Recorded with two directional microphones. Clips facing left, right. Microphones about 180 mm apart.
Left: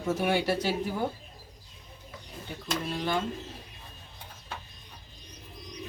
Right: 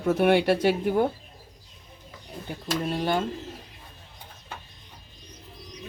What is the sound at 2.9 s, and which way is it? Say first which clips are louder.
Speech: right 4 dB; 40° right (ahead or behind).